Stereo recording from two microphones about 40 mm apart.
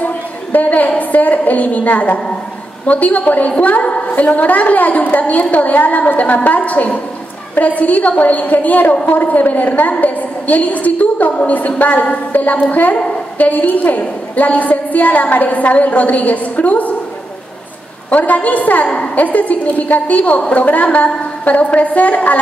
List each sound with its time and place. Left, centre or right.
0.0 s a woman's voice: left
18.1 s a woman's voice: left